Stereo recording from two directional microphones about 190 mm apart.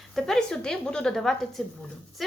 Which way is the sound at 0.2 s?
Centre (ahead or behind).